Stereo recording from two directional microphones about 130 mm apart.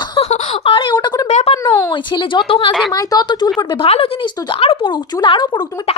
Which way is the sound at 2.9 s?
30° left (ahead or behind).